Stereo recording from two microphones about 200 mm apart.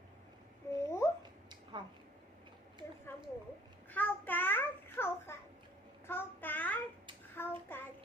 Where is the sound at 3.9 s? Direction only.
10° left (ahead or behind).